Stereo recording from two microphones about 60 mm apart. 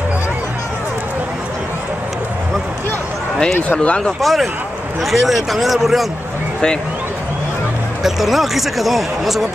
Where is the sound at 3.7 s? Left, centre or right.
Left.